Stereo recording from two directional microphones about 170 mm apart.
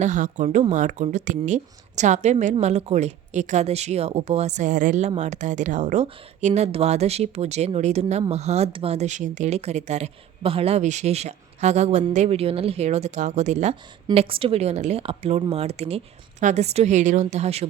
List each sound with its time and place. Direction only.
0.0 s speech: 45° right (ahead or behind)